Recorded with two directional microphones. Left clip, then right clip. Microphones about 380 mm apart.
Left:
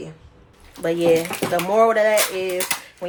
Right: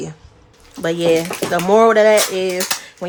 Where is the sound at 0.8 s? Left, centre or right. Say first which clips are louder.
Right 2 dB; right.